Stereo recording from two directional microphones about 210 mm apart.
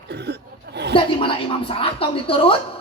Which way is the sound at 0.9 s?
25° left (ahead or behind).